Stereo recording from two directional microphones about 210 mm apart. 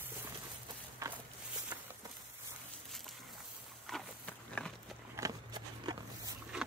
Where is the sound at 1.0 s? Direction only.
15° right (ahead or behind).